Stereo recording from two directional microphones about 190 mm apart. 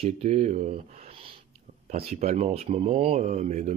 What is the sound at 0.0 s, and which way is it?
Speech, 35° right (ahead or behind).